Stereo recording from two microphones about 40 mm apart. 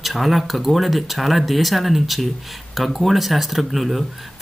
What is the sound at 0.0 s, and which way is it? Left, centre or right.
Speech, centre.